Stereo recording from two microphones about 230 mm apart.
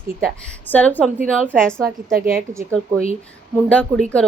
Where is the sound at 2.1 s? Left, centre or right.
Right.